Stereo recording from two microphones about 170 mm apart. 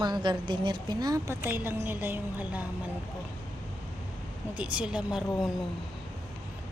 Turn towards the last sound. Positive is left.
turn(degrees=-5)  # may be behind; listen again after turning